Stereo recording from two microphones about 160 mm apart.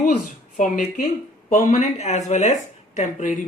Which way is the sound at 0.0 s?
55° left (ahead or behind).